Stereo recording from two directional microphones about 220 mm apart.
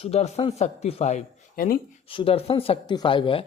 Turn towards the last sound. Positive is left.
turn(degrees=25)  # may be behind; listen again after turning